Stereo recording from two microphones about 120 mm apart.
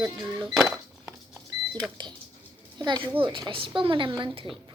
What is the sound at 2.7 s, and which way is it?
A child's voice, 40° right (ahead or behind).